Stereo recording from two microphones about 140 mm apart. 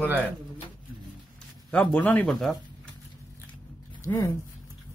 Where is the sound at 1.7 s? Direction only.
10° left (ahead or behind).